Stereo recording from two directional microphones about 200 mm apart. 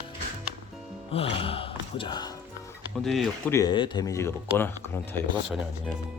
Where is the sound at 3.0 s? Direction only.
Centre (ahead or behind).